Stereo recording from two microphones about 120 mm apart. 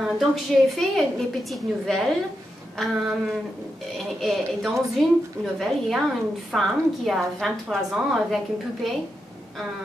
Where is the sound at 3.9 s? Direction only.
Centre (ahead or behind).